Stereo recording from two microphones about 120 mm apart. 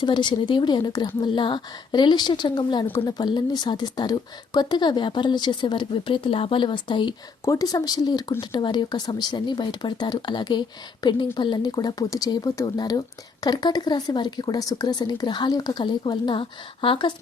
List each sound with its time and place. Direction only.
0.0 s speech: 40° left (ahead or behind)
7.4 s speech: 30° left (ahead or behind)